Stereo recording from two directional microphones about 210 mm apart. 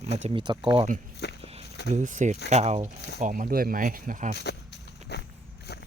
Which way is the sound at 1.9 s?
35° right (ahead or behind).